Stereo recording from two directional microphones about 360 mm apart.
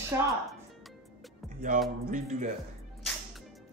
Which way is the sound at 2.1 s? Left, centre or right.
Right.